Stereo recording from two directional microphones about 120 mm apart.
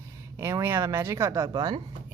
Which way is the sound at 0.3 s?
20° right (ahead or behind).